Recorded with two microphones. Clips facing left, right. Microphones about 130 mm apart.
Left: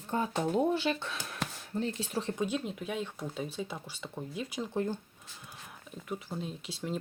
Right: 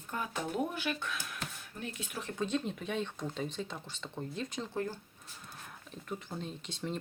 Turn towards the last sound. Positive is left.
turn(degrees=5)  # may be behind; listen again after turning